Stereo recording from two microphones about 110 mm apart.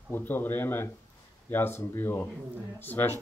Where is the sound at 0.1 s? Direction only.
20° left (ahead or behind).